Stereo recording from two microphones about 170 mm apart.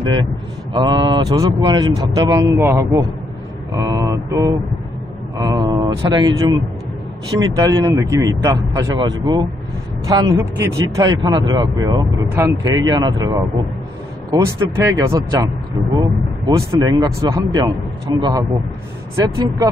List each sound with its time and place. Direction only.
0.0 s a man's voice: 25° right (ahead or behind)
14.4 s speech: 15° right (ahead or behind)